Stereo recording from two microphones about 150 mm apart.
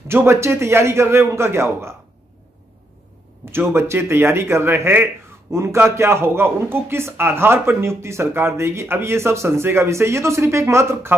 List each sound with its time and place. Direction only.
0.1 s speech: 15° right (ahead or behind)
3.5 s speech: 15° right (ahead or behind)